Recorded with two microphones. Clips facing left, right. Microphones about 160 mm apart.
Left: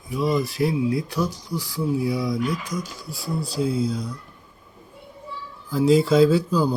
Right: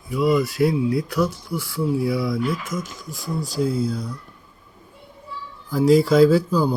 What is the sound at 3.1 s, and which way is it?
Speech, 35° left (ahead or behind).